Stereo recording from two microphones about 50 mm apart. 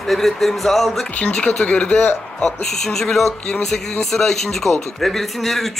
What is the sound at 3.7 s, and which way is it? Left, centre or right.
Speech, centre.